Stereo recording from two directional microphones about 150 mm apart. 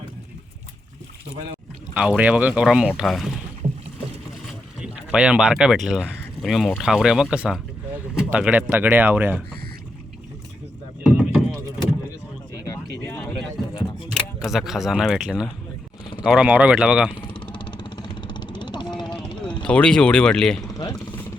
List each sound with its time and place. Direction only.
1.9 s speech: 5° right (ahead or behind)
3.6 s boat: 35° right (ahead or behind)
4.8 s speech: 5° right (ahead or behind)
11.0 s rowboat: 5° right (ahead or behind)
12.6 s a sound: 20° left (ahead or behind)
13.2 s a sound: 30° left (ahead or behind)
14.1 s speech: centre (ahead or behind)
17.2 s vehicle: 35° left (ahead or behind)
19.6 s speech: 5° left (ahead or behind)
20.6 s vehicle: 25° left (ahead or behind)